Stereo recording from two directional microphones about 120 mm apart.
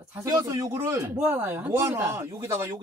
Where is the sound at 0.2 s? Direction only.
30° right (ahead or behind).